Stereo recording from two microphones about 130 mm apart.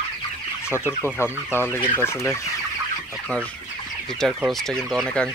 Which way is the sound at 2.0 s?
20° left (ahead or behind).